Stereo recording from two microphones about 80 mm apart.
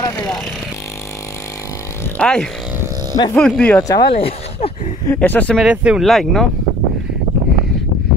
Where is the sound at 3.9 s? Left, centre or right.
Left.